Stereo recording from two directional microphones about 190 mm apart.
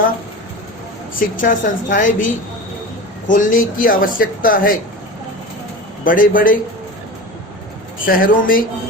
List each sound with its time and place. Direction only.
1.4 s speech: 45° left (ahead or behind)
3.2 s speech: 45° left (ahead or behind)
6.1 s speech: 45° left (ahead or behind)
8.0 s speech: 50° left (ahead or behind)